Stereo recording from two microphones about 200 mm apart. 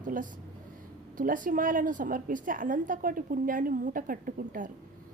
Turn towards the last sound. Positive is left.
turn(degrees=-45)  # may be behind; listen again after turning